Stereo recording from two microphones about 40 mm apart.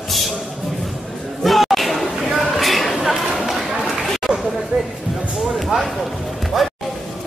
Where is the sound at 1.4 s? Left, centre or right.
Centre.